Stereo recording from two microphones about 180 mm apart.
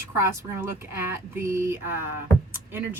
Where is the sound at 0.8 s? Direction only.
15° right (ahead or behind).